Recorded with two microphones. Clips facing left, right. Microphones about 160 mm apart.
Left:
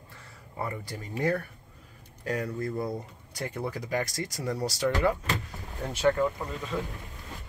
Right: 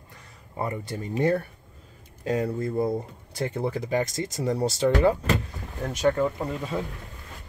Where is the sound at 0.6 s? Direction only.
25° right (ahead or behind).